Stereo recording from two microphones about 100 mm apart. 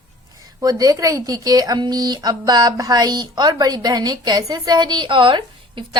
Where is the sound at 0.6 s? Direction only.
40° right (ahead or behind).